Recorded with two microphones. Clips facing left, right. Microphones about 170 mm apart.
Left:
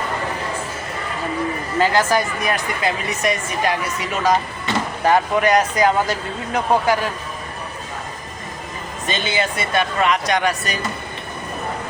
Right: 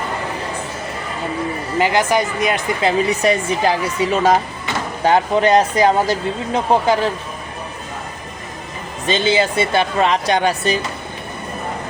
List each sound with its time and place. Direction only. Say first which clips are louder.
1.8 s speech: right 1 dB; 15° right (ahead or behind)
9.0 s speech: right 6 dB; 30° right (ahead or behind)